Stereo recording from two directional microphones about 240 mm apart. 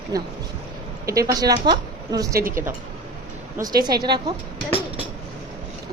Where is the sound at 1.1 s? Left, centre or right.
Centre.